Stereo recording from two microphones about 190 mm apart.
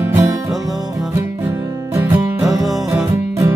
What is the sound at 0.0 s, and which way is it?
Music, 15° right (ahead or behind).